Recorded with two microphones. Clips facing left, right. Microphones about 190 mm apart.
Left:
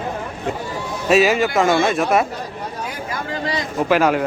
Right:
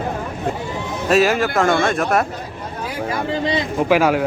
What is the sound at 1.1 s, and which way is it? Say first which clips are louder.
A man's voice: left 1 dB; centre (ahead or behind).